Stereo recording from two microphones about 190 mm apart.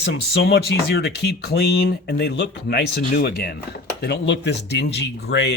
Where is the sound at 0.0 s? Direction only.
60° left (ahead or behind).